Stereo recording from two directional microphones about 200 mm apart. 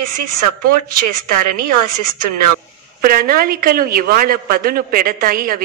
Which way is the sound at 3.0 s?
45° right (ahead or behind).